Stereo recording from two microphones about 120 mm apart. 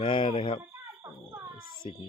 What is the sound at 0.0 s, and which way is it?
Speech, 40° left (ahead or behind).